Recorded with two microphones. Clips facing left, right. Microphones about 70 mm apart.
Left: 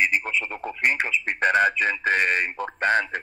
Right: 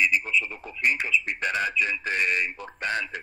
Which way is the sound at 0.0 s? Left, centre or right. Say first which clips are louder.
Left 1 dB; left.